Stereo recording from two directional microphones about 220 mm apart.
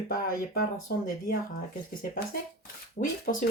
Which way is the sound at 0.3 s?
40° left (ahead or behind).